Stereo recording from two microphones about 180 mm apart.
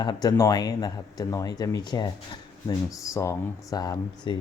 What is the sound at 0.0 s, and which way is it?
Speech, 25° left (ahead or behind).